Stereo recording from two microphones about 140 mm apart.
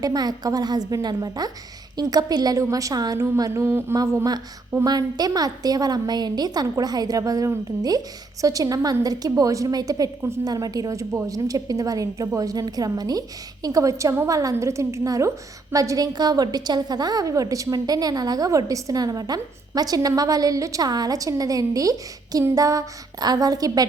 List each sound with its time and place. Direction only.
0.0 s a woman's voice: 30° right (ahead or behind)